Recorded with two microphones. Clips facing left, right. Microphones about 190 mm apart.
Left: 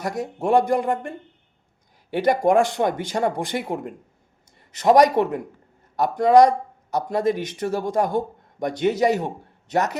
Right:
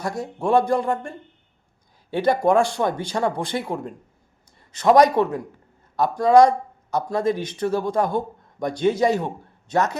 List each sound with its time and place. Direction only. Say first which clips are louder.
0.0 s speech: even; 15° left (ahead or behind)
4.9 s speech: right 1 dB; 15° left (ahead or behind)